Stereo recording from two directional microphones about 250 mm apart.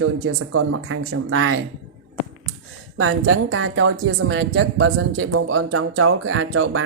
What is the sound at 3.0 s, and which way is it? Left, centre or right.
Speech, right.